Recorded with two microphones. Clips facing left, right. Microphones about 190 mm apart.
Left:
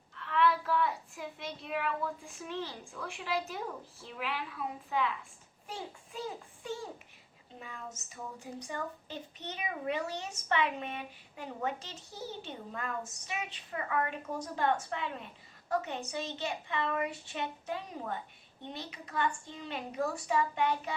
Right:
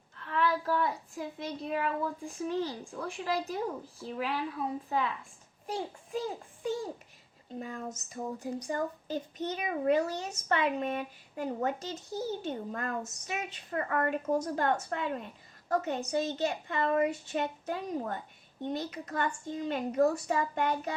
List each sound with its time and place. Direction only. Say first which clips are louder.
0.2 s a child's voice: left 1 dB; 40° right (ahead or behind)
7.6 s a child's voice: right 6 dB; 45° right (ahead or behind)